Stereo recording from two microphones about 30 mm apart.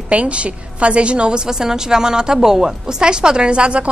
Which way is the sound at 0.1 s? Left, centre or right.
Right.